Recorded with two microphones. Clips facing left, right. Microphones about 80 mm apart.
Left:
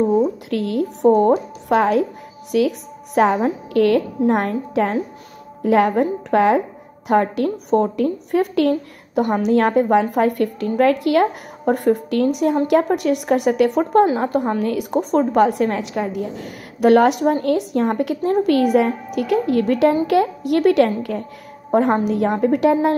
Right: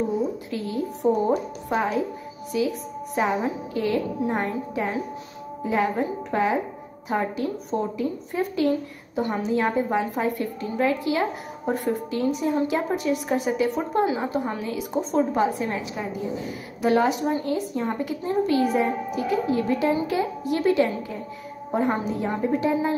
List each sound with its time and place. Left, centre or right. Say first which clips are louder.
0.5 s a woman's voice: left 7 dB; left